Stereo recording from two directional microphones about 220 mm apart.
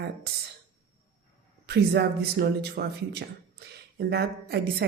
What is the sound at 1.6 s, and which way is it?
Speech, 50° right (ahead or behind).